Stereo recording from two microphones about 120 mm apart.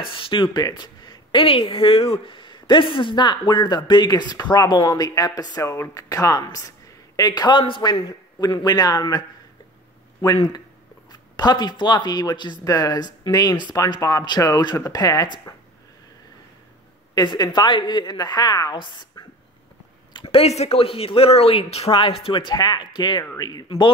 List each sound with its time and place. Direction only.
0.1 s a woman's voice: 45° left (ahead or behind)
10.2 s speech: 35° left (ahead or behind)
17.1 s speech: 35° left (ahead or behind)